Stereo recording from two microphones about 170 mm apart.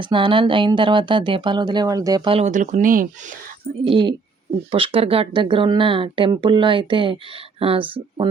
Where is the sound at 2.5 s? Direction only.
50° right (ahead or behind).